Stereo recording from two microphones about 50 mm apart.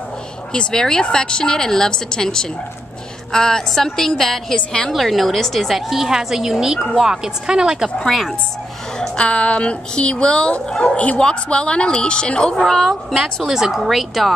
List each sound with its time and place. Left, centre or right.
0.5 s a woman's voice: centre
9.1 s speech: left
13.2 s a woman's voice: centre